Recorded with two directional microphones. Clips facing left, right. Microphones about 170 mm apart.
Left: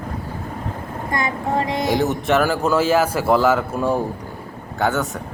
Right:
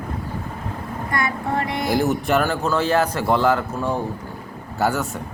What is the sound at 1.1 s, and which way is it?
Music, 20° left (ahead or behind).